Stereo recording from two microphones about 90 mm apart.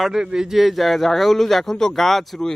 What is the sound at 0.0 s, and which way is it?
A man's voice, 5° right (ahead or behind).